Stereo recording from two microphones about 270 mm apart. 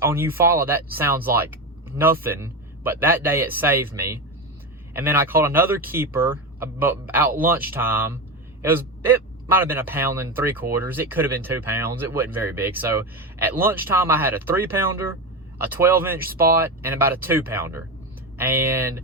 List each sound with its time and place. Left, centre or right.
0.0 s speech: centre